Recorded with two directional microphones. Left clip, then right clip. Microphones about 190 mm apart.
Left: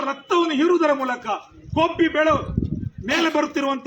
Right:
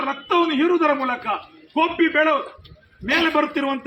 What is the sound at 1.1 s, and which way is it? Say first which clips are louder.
A man's voice: right 1 dB; 5° left (ahead or behind).